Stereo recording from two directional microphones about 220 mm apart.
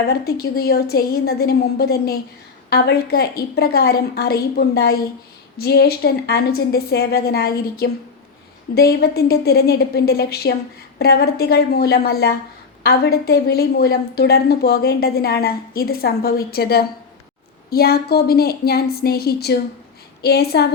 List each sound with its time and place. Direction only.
0.1 s a woman's voice: 45° left (ahead or behind)